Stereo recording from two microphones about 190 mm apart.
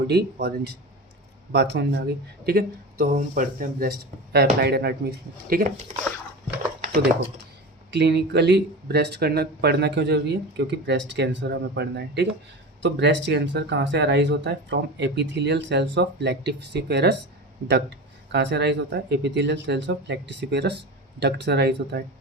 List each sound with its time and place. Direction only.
0.1 s speech: 60° right (ahead or behind)
7.9 s speech: 60° right (ahead or behind)
12.8 s speech: 70° right (ahead or behind)